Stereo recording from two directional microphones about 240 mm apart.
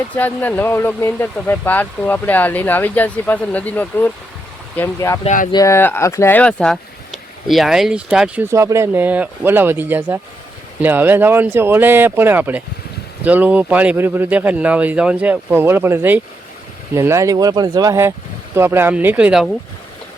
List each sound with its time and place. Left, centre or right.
0.2 s speech: centre
5.2 s speech: left
5.5 s speech: centre